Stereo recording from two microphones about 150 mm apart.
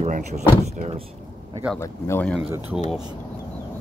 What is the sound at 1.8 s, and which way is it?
Speech, 15° left (ahead or behind).